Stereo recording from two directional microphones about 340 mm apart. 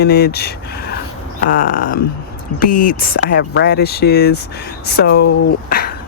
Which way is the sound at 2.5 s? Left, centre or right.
Left.